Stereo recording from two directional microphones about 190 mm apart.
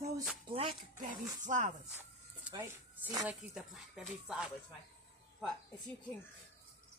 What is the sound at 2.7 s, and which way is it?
Speech, 15° right (ahead or behind).